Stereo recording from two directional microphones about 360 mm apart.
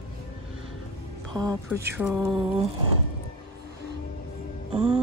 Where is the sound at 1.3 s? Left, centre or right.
Centre.